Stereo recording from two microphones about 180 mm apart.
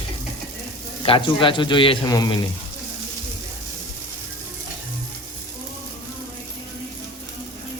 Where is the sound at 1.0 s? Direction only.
30° left (ahead or behind).